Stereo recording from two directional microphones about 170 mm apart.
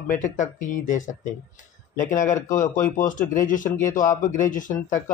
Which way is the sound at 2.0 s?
50° left (ahead or behind).